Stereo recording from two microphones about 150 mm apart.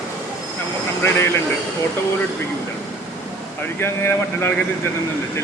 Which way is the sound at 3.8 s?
15° left (ahead or behind).